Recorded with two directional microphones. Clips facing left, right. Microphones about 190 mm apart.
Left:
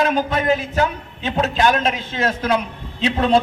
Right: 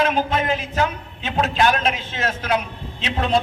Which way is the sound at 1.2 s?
35° left (ahead or behind).